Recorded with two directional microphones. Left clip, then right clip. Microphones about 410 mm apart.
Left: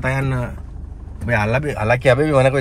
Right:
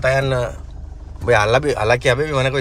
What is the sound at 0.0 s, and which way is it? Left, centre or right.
Speech, centre.